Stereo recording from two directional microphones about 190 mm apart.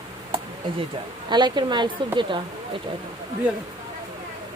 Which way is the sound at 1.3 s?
25° right (ahead or behind).